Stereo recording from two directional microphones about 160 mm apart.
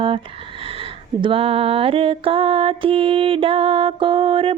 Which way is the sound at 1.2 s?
35° right (ahead or behind).